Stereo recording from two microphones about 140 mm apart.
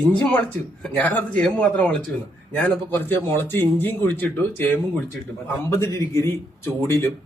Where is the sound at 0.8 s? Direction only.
10° left (ahead or behind).